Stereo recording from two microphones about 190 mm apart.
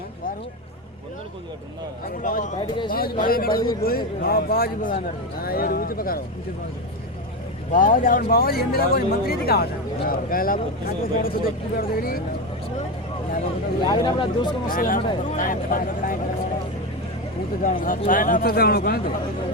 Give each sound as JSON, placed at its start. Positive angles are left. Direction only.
{"t": 2.0, "sound": "speech", "side_deg": 45}
{"t": 2.6, "sound": "speech", "side_deg": 25}
{"t": 2.9, "sound": "speech", "side_deg": 50}
{"t": 7.7, "sound": "speech", "side_deg": 45}
{"t": 13.8, "sound": "speech", "side_deg": 25}
{"t": 14.7, "sound": "speech", "side_deg": 45}
{"t": 17.6, "sound": "speech", "side_deg": 45}